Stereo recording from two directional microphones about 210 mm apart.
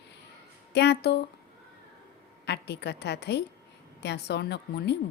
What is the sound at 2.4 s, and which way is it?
Speech, 55° left (ahead or behind).